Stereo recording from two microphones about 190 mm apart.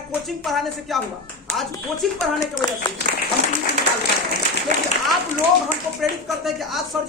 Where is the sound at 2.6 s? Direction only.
20° left (ahead or behind).